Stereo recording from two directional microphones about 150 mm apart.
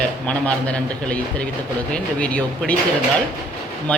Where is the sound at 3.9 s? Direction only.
10° left (ahead or behind).